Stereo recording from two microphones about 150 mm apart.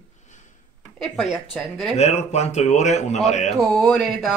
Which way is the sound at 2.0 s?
45° left (ahead or behind).